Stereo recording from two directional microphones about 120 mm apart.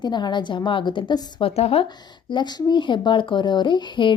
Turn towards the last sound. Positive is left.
turn(degrees=40)  # may be behind; listen again after turning